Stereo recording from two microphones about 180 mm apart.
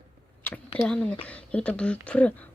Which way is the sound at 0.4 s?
10° left (ahead or behind).